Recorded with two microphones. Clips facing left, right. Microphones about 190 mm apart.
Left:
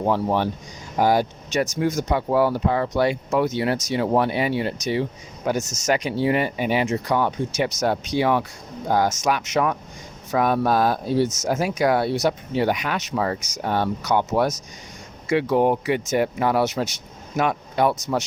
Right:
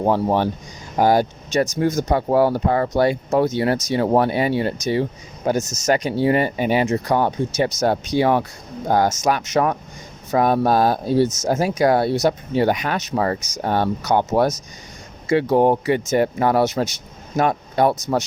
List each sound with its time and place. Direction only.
0.0 s speech: 45° right (ahead or behind)